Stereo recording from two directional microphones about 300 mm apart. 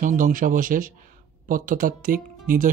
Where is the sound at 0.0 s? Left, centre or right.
Right.